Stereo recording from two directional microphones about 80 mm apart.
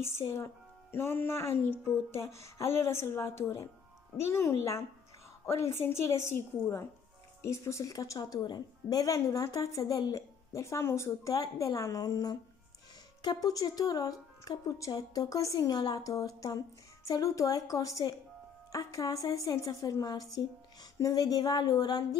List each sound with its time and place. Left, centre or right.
0.0 s speech: left
7.9 s speech: left